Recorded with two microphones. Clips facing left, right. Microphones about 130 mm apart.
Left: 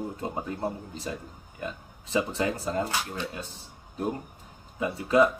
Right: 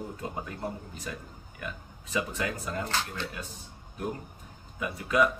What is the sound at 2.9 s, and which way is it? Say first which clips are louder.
Speech: left 1 dB; 10° left (ahead or behind).